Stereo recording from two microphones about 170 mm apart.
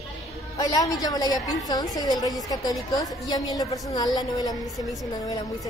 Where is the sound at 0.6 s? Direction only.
20° left (ahead or behind).